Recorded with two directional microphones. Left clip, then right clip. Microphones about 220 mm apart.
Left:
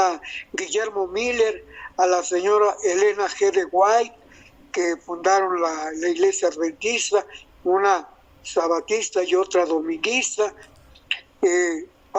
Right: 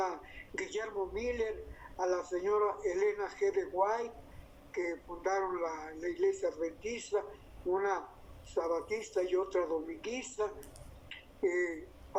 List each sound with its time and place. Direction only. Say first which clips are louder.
0.0 s speech: left 15 dB; 45° left (ahead or behind)